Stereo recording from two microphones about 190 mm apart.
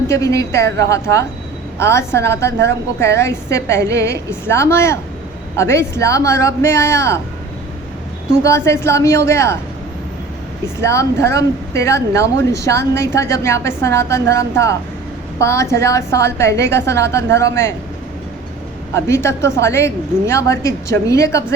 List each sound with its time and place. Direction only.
0.1 s a woman's voice: 15° left (ahead or behind)
8.4 s a woman's voice: 15° left (ahead or behind)
10.8 s a woman's voice: 15° left (ahead or behind)
18.9 s a woman's voice: 15° left (ahead or behind)